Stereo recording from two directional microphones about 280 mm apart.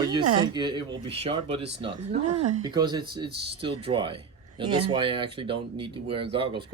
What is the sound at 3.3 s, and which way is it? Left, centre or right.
Speech, right.